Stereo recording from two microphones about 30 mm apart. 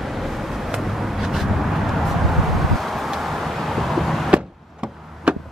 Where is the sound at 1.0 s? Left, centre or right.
Centre.